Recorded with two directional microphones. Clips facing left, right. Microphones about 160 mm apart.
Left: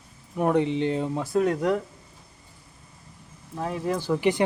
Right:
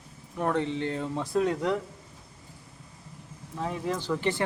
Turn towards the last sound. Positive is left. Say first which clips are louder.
# left 5 dB
turn(degrees=15)  # may be behind; listen again after turning